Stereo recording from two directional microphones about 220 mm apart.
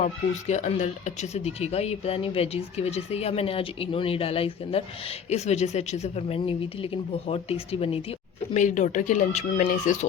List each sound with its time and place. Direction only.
0.0 s speech: 30° left (ahead or behind)